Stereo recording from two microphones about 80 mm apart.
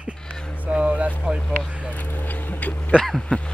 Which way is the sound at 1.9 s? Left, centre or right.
Left.